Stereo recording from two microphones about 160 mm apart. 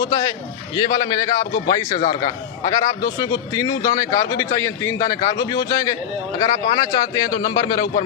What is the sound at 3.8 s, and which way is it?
A man's voice, 20° left (ahead or behind).